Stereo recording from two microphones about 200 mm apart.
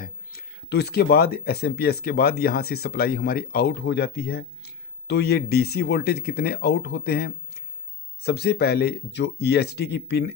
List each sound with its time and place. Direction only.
0.0 s speech: 50° left (ahead or behind)